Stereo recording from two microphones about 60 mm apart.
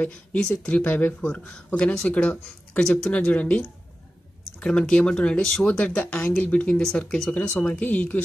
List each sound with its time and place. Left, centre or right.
0.0 s speech: left
6.8 s speech: centre
7.6 s speech: left